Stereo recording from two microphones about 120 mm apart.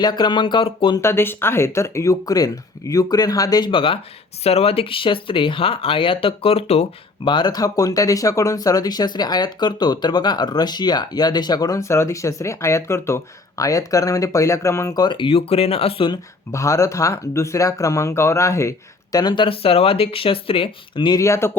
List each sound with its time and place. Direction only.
0.0 s speech: 35° left (ahead or behind)
0.9 s speech: 20° left (ahead or behind)
3.7 s speech: 45° left (ahead or behind)
7.3 s speech: 40° left (ahead or behind)
16.1 s speech: 25° left (ahead or behind)
19.1 s speech: 40° left (ahead or behind)
21.2 s speech: 25° left (ahead or behind)